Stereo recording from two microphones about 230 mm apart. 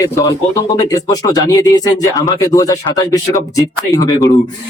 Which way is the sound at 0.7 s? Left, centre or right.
Centre.